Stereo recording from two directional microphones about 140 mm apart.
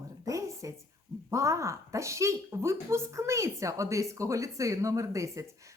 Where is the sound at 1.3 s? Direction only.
20° right (ahead or behind).